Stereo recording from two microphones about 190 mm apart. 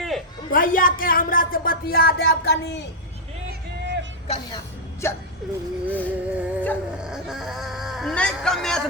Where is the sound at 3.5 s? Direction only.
65° right (ahead or behind).